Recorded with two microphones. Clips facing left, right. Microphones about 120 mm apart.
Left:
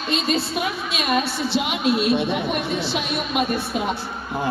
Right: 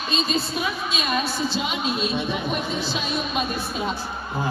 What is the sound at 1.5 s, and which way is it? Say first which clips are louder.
A woman's voice: left 5 dB; 65° left (ahead or behind).